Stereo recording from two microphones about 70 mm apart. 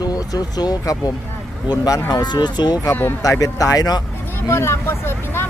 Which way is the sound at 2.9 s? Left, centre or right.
Left.